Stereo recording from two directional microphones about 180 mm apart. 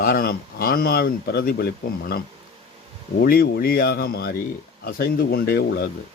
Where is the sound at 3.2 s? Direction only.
60° left (ahead or behind).